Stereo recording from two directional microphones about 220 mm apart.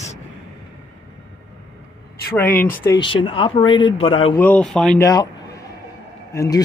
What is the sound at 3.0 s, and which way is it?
Speech, 25° left (ahead or behind).